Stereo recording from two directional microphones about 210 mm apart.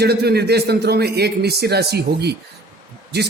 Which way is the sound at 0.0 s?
50° right (ahead or behind).